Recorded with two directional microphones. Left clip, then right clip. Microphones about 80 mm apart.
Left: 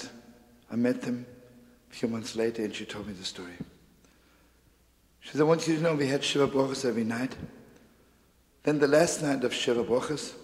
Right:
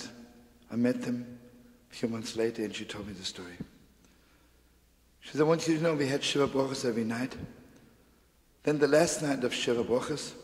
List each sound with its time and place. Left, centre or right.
0.7 s a man's voice: right
5.2 s a man's voice: right
8.6 s a man's voice: right